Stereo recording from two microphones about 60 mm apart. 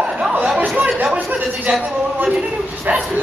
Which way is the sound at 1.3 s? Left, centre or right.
Right.